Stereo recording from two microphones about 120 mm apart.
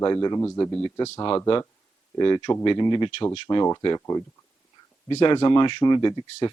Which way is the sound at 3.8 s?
30° left (ahead or behind).